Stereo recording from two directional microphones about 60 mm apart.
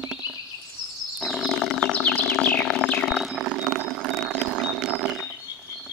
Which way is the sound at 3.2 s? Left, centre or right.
Centre.